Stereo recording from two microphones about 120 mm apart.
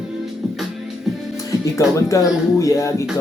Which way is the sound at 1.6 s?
25° left (ahead or behind).